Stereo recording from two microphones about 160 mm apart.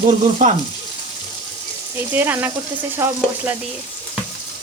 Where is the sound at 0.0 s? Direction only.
45° right (ahead or behind).